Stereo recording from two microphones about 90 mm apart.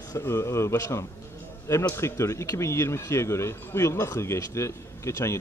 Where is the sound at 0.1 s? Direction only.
30° left (ahead or behind).